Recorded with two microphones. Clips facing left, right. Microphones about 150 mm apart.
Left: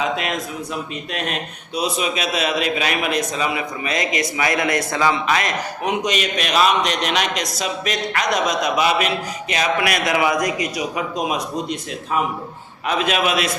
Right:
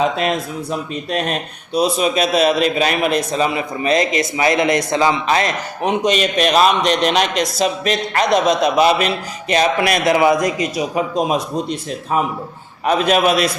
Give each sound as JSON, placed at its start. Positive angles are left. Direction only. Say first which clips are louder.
{"t": 0.0, "sound": "a man's voice", "louder": "right 5 dB", "side_deg": -35}